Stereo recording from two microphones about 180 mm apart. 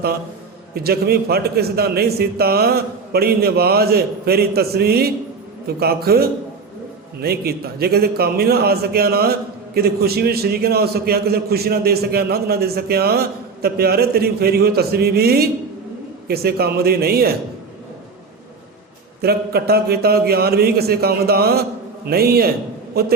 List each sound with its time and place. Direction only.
0.7 s a man's voice: 60° right (ahead or behind)
19.2 s a man's voice: 60° right (ahead or behind)